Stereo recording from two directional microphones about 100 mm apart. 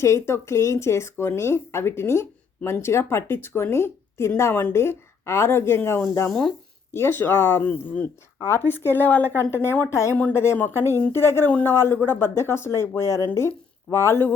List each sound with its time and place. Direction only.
0.0 s speech: 30° left (ahead or behind)